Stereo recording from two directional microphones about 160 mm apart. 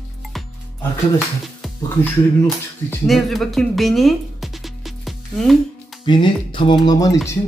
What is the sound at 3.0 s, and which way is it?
Speech, centre (ahead or behind).